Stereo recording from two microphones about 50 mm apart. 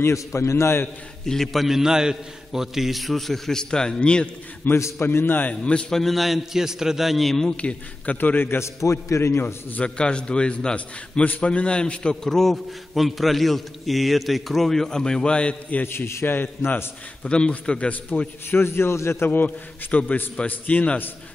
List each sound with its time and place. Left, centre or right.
0.0 s a man's voice: left
1.2 s a man's voice: centre
1.5 s a man's voice: centre
4.9 s a man's voice: left
5.5 s a man's voice: left
5.9 s a man's voice: centre
7.6 s a man's voice: left
8.5 s a man's voice: left
9.1 s a man's voice: left
9.8 s a man's voice: left
15.9 s a man's voice: left
17.2 s a man's voice: left
18.5 s a man's voice: left
19.3 s a man's voice: left